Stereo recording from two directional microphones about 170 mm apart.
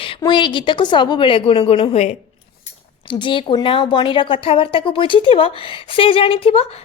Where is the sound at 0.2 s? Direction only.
25° left (ahead or behind).